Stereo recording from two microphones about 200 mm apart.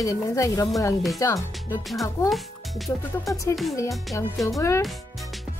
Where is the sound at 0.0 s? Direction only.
15° left (ahead or behind).